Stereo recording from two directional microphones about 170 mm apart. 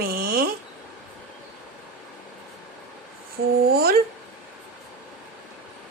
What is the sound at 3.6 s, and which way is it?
Speech, 65° right (ahead or behind).